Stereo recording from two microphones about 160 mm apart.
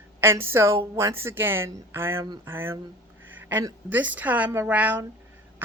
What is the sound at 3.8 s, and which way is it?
Speech, 10° right (ahead or behind).